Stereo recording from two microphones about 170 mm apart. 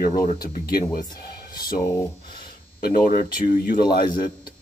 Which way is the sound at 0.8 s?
55° left (ahead or behind).